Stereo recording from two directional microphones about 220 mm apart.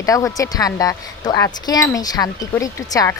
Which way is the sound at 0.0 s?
15° left (ahead or behind).